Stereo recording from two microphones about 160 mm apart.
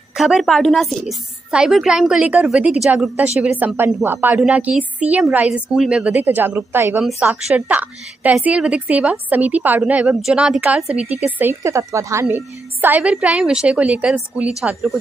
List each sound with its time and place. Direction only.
0.2 s a woman's voice: centre (ahead or behind)
10.9 s a woman's voice: 40° right (ahead or behind)
11.1 s a woman's voice: 10° right (ahead or behind)